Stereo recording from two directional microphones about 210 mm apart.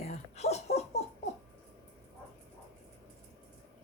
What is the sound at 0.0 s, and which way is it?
Laughter, 30° left (ahead or behind).